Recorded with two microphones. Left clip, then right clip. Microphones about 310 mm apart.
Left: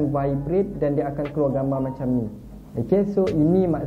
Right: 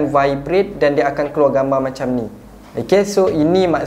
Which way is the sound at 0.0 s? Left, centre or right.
Centre.